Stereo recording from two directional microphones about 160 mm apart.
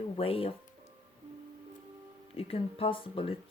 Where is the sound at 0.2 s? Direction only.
35° left (ahead or behind).